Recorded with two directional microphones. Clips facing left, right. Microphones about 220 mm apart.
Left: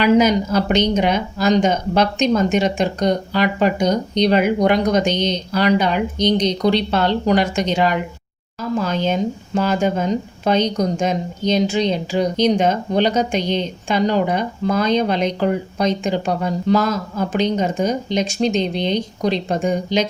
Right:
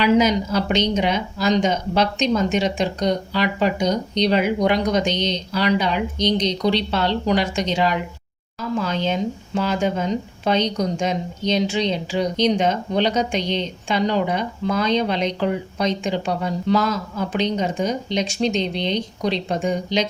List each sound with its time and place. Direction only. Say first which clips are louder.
0.0 s speech: left 3 dB; 50° left (ahead or behind)